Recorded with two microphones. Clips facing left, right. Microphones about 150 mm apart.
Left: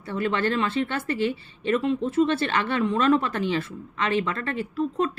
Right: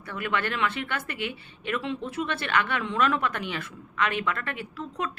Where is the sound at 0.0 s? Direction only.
25° left (ahead or behind).